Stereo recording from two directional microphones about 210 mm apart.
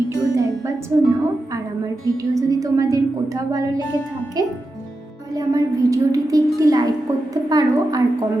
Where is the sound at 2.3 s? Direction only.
15° right (ahead or behind).